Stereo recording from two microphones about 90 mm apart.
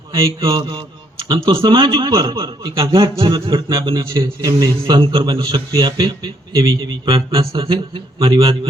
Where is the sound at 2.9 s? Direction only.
75° right (ahead or behind).